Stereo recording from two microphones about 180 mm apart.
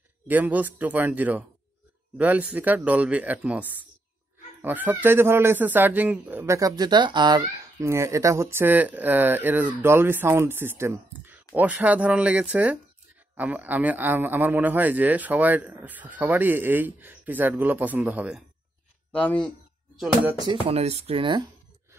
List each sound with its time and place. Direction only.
0.3 s speech: 10° right (ahead or behind)
19.1 s speech: 5° left (ahead or behind)
20.6 s speech: 35° right (ahead or behind)